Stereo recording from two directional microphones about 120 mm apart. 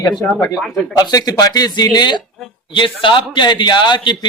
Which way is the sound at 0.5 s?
Centre (ahead or behind).